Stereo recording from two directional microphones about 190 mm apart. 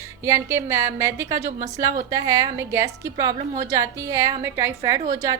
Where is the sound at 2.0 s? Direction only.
20° right (ahead or behind).